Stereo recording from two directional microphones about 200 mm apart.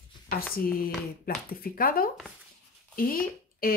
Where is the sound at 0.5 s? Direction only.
45° left (ahead or behind).